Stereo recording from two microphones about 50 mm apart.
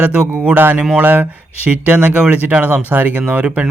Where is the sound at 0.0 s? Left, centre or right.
Right.